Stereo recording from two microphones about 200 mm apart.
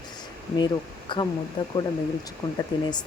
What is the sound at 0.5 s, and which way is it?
Speech, 25° left (ahead or behind).